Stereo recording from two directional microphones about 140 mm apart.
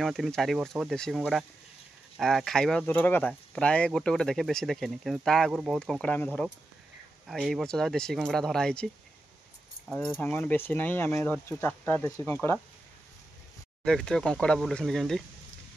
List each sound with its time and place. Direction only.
0.0 s speech: centre (ahead or behind)
5.8 s speech: 5° left (ahead or behind)
7.2 s speech: centre (ahead or behind)
10.2 s speech: 10° left (ahead or behind)
13.8 s speech: 5° left (ahead or behind)